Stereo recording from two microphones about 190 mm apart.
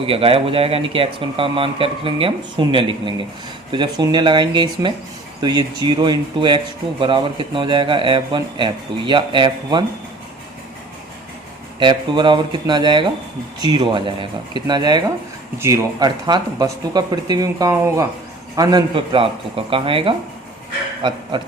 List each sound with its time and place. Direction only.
0.0 s speech: 30° right (ahead or behind)
11.8 s speech: 25° right (ahead or behind)